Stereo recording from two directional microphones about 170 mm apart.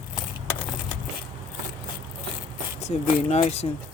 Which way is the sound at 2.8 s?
40° left (ahead or behind).